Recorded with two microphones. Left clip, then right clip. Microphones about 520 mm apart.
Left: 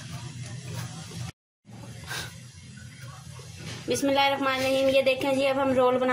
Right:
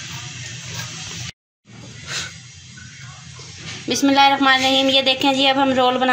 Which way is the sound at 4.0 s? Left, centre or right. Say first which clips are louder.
Right 10 dB; left.